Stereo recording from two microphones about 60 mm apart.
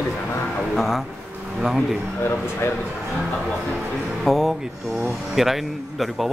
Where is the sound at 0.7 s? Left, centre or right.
Centre.